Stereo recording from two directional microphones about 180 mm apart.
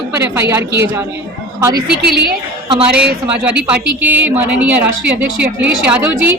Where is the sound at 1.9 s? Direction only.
65° right (ahead or behind).